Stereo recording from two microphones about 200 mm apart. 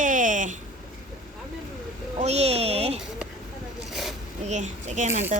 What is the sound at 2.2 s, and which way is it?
Speech, 30° right (ahead or behind).